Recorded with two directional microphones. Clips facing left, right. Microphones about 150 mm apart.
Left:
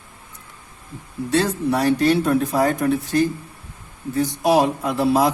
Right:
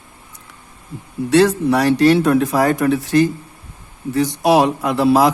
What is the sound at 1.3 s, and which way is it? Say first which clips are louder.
Speech: right 6 dB; 85° right.